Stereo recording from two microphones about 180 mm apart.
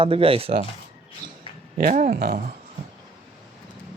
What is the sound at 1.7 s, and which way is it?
Speech, 45° right (ahead or behind).